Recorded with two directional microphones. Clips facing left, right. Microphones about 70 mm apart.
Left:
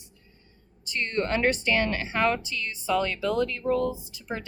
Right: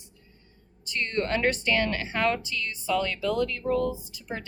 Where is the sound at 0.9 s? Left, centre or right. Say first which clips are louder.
Even; left.